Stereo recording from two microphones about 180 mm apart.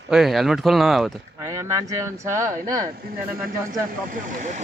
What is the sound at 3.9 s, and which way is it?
Speech, 50° right (ahead or behind).